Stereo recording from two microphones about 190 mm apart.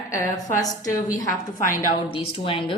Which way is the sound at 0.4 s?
20° left (ahead or behind).